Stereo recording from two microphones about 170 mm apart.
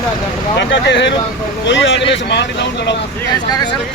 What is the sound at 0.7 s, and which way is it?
Speech, 90° left.